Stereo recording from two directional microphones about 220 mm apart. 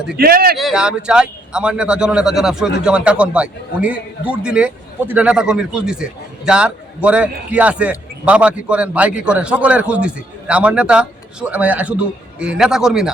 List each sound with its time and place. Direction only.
0.2 s speech: 45° right (ahead or behind)
0.5 s a man's voice: centre (ahead or behind)